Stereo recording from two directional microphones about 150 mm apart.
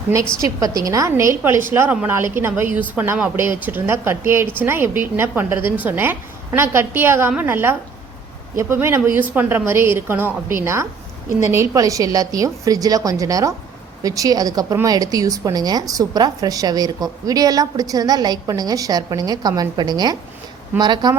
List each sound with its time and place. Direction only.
0.3 s a woman's voice: 20° right (ahead or behind)